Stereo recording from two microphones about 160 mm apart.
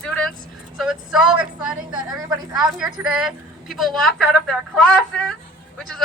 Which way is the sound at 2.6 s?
5° right (ahead or behind).